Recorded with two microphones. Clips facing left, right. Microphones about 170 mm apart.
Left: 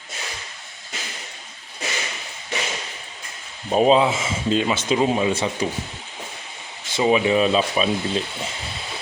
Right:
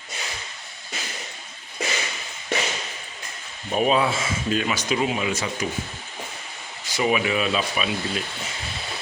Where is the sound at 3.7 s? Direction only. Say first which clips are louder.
Left 5 dB; 30° left (ahead or behind).